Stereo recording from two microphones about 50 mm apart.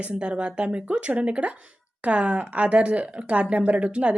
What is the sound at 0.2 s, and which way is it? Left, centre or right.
A woman's voice, right.